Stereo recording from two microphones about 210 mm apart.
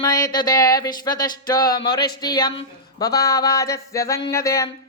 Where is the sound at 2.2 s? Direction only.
20° left (ahead or behind).